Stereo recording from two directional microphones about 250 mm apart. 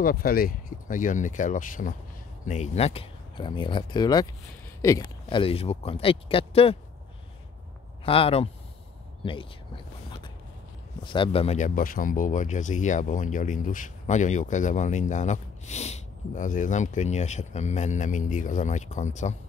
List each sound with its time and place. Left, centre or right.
0.0 s speech: left; by 4.3 s centre
5.3 s speech: left
8.0 s speech: left
11.1 s speech: left